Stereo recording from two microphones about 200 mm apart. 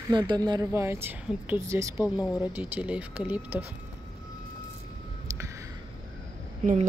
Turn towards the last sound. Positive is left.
turn(degrees=-40)  # may be behind; listen again after turning